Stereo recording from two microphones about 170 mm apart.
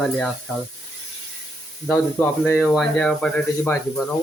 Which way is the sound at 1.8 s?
10° left (ahead or behind).